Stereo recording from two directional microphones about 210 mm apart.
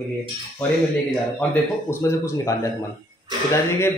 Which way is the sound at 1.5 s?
10° left (ahead or behind).